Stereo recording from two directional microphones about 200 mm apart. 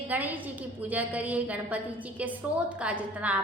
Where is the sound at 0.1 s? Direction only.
10° right (ahead or behind).